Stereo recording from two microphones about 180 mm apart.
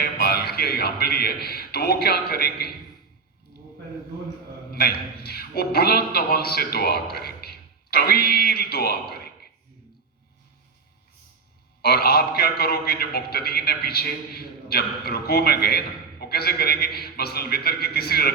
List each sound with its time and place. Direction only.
0.0 s a man's voice: 60° left (ahead or behind)
4.7 s a man's voice: 60° left (ahead or behind)
11.8 s a man's voice: 60° left (ahead or behind)